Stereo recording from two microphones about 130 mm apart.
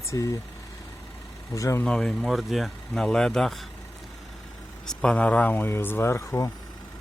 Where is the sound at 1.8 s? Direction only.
5° left (ahead or behind).